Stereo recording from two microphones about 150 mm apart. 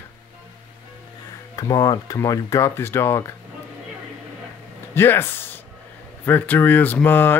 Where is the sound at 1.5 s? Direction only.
25° left (ahead or behind).